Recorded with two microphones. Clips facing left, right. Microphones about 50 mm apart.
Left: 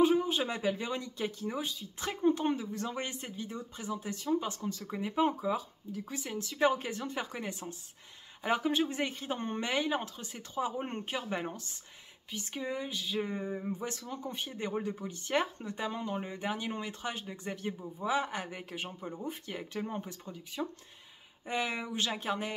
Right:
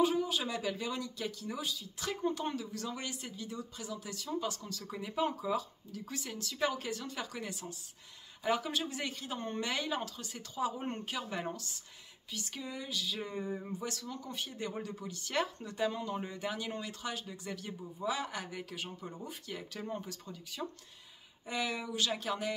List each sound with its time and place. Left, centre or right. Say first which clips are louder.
0.0 s speech: left 4 dB; left